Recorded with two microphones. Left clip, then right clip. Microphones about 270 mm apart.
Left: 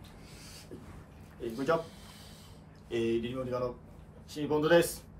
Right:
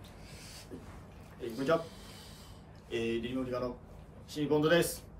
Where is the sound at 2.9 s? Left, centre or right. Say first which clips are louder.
Left 3 dB; centre.